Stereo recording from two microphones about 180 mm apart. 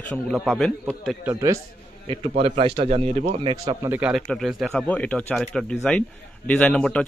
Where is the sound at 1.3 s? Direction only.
20° right (ahead or behind).